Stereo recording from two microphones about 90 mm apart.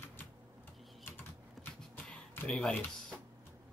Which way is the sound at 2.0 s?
10° left (ahead or behind).